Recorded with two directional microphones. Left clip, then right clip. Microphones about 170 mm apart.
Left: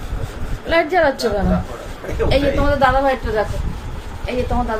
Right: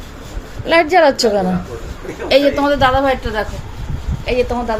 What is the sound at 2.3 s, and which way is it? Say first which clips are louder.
Speech: right 6 dB; 65° right (ahead or behind).